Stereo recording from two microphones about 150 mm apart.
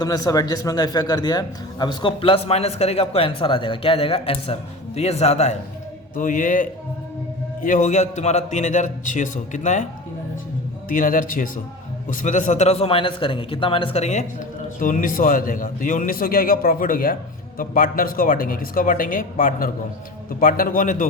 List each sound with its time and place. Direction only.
0.0 s a man's voice: 25° left (ahead or behind); by 5.5 s 45° left (ahead or behind)
6.1 s a man's voice: 60° left (ahead or behind)
10.8 s a man's voice: 65° left (ahead or behind)